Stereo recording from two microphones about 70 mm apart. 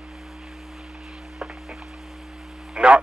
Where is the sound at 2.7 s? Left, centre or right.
Centre.